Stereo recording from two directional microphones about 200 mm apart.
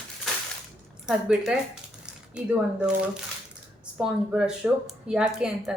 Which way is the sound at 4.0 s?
5° right (ahead or behind).